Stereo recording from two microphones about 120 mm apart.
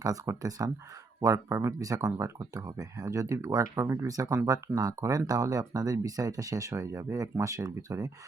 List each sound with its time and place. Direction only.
0.0 s speech: 30° right (ahead or behind)